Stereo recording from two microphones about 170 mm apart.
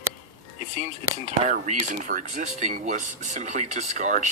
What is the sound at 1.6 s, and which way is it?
Speech, 45° right (ahead or behind).